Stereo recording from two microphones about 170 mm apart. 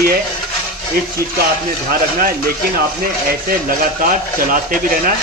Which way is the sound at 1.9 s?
60° right (ahead or behind).